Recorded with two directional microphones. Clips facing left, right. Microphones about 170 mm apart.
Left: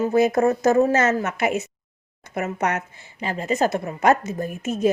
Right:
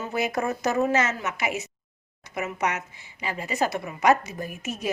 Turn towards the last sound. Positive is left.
turn(degrees=50)  # may be behind; listen again after turning